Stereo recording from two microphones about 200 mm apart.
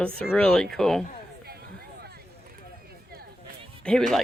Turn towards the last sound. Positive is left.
turn(degrees=0)  # may be behind; listen again after turning